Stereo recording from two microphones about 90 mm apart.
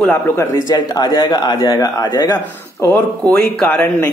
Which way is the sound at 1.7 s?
45° left (ahead or behind).